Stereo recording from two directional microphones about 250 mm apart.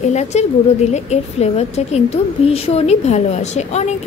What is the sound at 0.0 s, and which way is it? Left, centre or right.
A woman's voice, left.